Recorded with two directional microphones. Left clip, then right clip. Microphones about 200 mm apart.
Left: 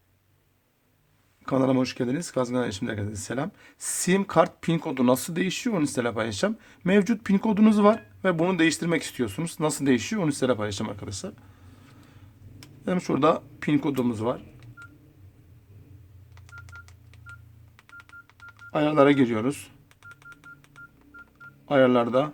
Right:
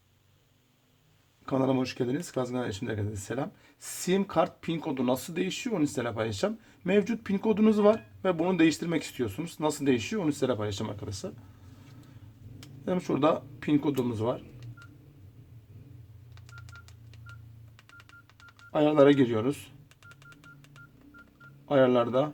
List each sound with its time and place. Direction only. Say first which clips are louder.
1.5 s speech: left 4 dB; 30° left (ahead or behind)
12.8 s speech: left 4 dB; 25° left (ahead or behind)
16.3 s telephone dialing: left 5 dB; 5° right (ahead or behind)
18.7 s speech: left 1 dB; 20° left (ahead or behind)
20.0 s telephone dialing: left 7 dB; centre (ahead or behind)
21.7 s speech: left 3 dB; 20° left (ahead or behind)